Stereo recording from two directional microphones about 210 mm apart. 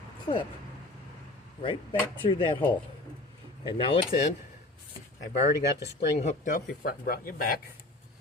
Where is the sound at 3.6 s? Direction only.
25° left (ahead or behind).